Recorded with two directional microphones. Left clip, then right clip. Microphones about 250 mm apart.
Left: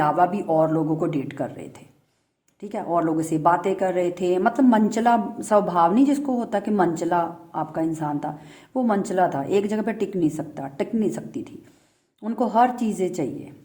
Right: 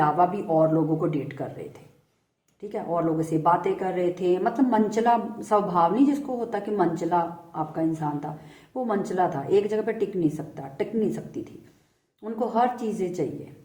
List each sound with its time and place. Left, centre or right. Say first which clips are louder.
0.0 s a woman's voice: left 2 dB; left
2.6 s speech: left 3 dB; left